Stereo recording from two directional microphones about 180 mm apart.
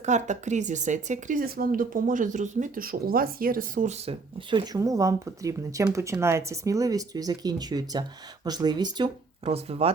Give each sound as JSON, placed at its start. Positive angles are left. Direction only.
{"t": 0.0, "sound": "speech", "side_deg": -40}
{"t": 9.4, "sound": "speech", "side_deg": -35}